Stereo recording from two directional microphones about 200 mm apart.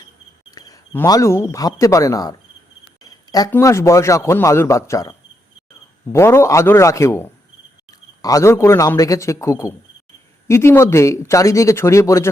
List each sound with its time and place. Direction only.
0.5 s speech: 20° left (ahead or behind)
3.3 s a man's voice: 15° left (ahead or behind)